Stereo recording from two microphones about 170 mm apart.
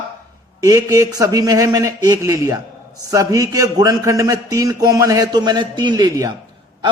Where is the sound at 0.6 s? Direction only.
20° right (ahead or behind).